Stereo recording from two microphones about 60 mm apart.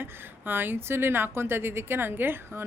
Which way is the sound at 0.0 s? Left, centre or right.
Right.